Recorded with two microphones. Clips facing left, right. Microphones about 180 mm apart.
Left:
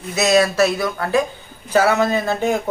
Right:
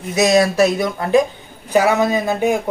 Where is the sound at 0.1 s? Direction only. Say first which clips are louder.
Right 2 dB; 15° right (ahead or behind).